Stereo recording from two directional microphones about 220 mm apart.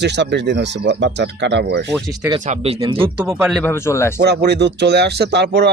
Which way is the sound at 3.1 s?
5° right (ahead or behind).